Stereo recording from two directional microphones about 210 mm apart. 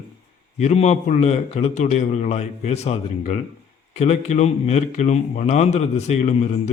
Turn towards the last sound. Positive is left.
turn(degrees=35)  # may be behind; listen again after turning